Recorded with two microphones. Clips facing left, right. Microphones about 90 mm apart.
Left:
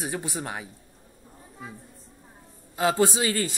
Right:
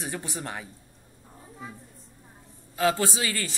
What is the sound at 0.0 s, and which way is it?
Speech, 20° left (ahead or behind).